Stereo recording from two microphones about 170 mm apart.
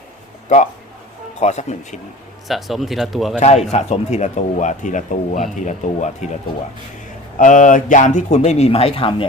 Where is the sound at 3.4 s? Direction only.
40° left (ahead or behind).